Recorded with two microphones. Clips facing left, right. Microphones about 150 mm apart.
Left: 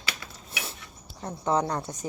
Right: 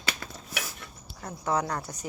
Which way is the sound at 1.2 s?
25° left (ahead or behind).